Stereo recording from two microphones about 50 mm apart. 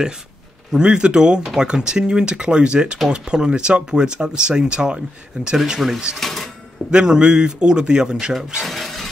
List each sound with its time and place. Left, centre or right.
0.7 s speech: centre
6.1 s cash register: centre
6.9 s speech: centre
8.6 s a sound: centre